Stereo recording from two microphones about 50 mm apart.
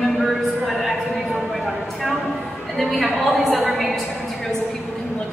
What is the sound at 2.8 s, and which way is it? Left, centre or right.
A woman's voice, centre.